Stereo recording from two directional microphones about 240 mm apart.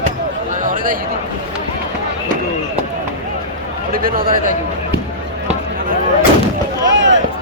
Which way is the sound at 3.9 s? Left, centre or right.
Right.